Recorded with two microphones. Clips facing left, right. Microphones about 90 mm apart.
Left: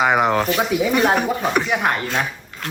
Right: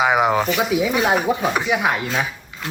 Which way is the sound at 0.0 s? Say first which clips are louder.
Even; 5° right (ahead or behind).